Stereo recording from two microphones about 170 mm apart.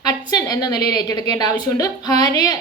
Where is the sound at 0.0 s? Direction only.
25° left (ahead or behind).